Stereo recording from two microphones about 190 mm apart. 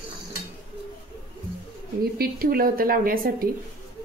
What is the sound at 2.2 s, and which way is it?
A woman's voice, 50° right (ahead or behind).